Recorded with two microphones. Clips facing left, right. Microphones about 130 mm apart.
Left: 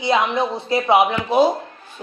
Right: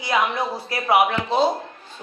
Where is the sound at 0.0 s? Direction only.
25° left (ahead or behind).